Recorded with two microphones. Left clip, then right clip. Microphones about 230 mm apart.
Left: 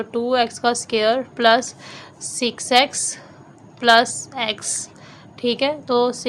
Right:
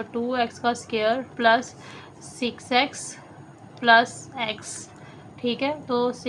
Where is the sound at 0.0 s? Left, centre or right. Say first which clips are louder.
Left 6 dB; left.